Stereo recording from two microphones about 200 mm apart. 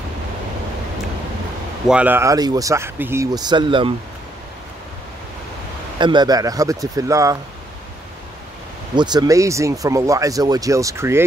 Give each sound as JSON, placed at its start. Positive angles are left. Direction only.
{"t": 1.9, "sound": "speech", "side_deg": -10}
{"t": 5.9, "sound": "speech", "side_deg": -20}
{"t": 8.9, "sound": "speech", "side_deg": -20}